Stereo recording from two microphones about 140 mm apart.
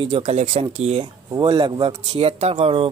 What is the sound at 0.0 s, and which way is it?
Speech, 45° right (ahead or behind).